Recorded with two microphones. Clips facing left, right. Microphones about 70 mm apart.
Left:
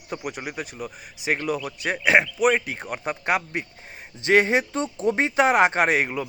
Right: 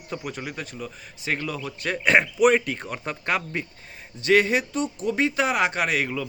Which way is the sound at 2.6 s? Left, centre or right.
Centre.